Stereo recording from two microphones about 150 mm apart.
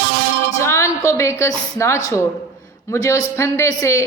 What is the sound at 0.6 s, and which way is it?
A man's voice, 20° left (ahead or behind).